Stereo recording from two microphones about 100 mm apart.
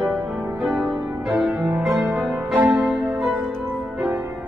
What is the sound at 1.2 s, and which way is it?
Music, 15° right (ahead or behind).